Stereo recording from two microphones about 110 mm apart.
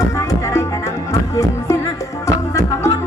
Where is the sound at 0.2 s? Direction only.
25° left (ahead or behind).